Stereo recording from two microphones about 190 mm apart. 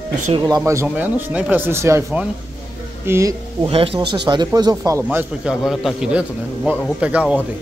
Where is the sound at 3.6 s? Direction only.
30° right (ahead or behind); by 7.4 s 5° right (ahead or behind).